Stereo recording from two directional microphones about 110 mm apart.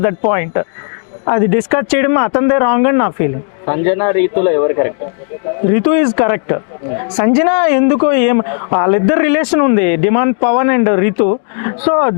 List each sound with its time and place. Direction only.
0.0 s speech: 20° left (ahead or behind)